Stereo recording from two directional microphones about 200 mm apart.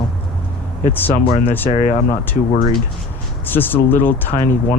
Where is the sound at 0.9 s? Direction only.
10° left (ahead or behind).